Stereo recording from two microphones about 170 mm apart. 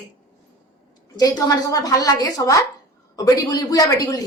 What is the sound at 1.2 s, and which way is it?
A woman's voice, 20° left (ahead or behind).